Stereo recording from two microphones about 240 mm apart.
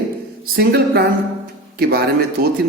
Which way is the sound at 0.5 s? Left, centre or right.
Right.